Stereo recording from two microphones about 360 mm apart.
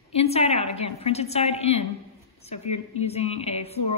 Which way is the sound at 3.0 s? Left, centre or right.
Centre.